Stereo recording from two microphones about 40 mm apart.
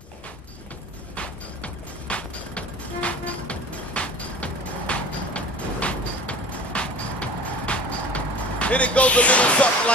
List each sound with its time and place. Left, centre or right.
1.1 s music: left